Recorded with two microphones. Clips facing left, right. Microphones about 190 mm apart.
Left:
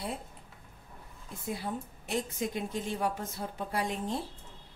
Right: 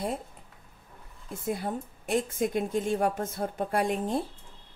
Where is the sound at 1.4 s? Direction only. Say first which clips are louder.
Right 4 dB; 50° right (ahead or behind).